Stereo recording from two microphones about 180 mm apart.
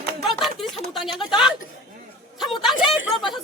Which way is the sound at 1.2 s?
5° right (ahead or behind).